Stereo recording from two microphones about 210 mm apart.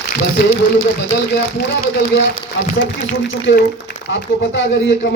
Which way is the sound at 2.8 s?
60° left (ahead or behind).